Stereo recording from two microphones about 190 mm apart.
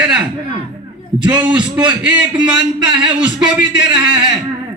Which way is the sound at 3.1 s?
5° right (ahead or behind).